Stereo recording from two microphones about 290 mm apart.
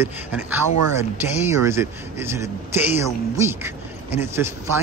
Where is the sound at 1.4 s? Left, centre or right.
Centre.